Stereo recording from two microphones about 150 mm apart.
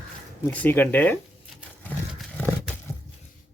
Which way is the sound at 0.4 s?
15° left (ahead or behind).